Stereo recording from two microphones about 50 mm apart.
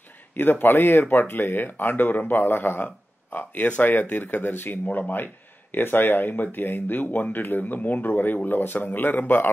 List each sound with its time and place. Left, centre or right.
0.3 s speech: left